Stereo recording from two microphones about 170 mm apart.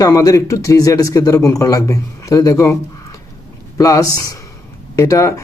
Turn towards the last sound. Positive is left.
turn(degrees=20)  # may be behind; listen again after turning